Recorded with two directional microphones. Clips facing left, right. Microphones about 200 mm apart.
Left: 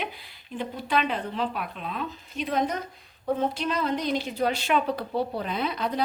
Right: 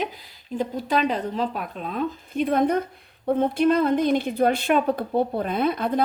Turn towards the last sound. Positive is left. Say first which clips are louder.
# right 6 dB
turn(degrees=-50)  # may be behind; listen again after turning